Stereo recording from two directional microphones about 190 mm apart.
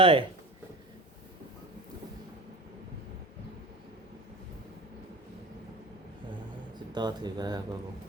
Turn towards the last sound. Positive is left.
turn(degrees=-20)  # may be behind; listen again after turning